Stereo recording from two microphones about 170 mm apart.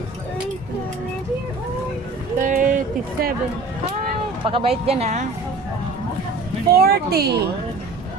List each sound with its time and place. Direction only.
2.4 s a sound: 50° right (ahead or behind)
4.4 s speech: 35° right (ahead or behind)
6.7 s speech: 65° right (ahead or behind)